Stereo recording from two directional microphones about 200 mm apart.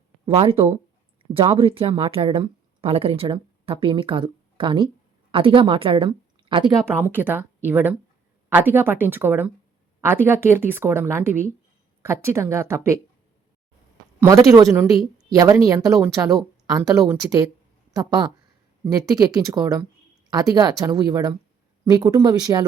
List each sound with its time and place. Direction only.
0.3 s a woman's voice: 25° right (ahead or behind)
7.1 s speech: 10° right (ahead or behind)
14.2 s speech: 15° right (ahead or behind)